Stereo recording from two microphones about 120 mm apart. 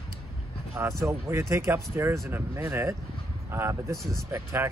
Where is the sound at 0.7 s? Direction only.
20° right (ahead or behind).